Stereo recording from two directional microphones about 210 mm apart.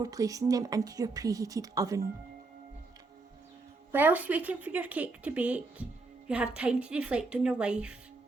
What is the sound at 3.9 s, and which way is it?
A woman's voice, 10° right (ahead or behind).